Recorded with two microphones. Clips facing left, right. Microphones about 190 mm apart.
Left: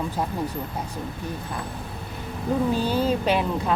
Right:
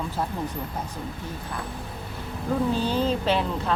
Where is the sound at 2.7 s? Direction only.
10° left (ahead or behind).